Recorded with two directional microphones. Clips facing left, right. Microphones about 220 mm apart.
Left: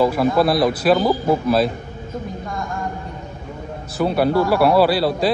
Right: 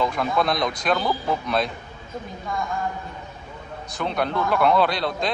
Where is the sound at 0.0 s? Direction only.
5° left (ahead or behind).